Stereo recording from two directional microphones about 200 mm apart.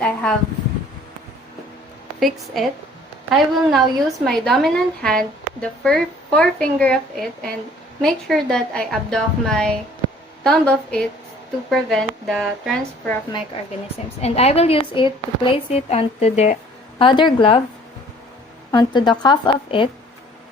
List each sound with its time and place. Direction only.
0.0 s a sound: 5° left (ahead or behind)
2.2 s a woman's voice: centre (ahead or behind)
14.2 s a woman's voice: 30° left (ahead or behind)
18.7 s a woman's voice: 20° left (ahead or behind)